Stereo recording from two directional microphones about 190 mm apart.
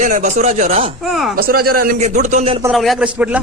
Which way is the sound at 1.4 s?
50° right (ahead or behind).